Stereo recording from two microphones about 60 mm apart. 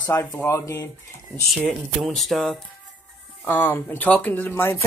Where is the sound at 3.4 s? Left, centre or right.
Left.